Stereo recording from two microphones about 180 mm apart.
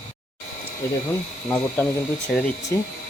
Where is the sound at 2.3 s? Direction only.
Centre (ahead or behind).